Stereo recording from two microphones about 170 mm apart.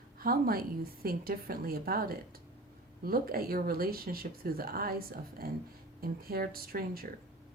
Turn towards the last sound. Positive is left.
turn(degrees=-60)  # may be behind; listen again after turning